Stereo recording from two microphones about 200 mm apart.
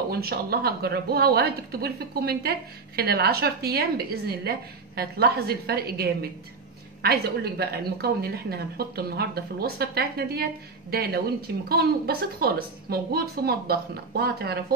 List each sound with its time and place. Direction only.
0.1 s a woman's voice: 50° right (ahead or behind)
11.7 s a woman's voice: 50° right (ahead or behind)